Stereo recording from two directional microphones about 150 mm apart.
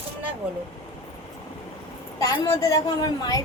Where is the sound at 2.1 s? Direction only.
20° left (ahead or behind).